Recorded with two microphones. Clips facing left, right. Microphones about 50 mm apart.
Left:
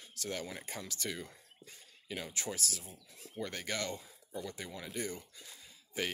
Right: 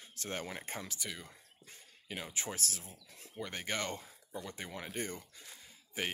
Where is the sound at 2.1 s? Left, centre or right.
Right.